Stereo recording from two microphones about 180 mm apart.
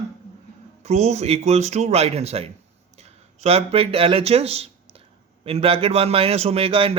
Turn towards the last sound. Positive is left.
turn(degrees=-30)  # may be behind; listen again after turning